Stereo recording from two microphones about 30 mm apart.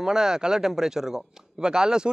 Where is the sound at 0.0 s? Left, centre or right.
Right.